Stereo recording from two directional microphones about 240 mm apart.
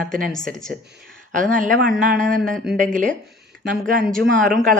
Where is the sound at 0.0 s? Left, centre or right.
Right.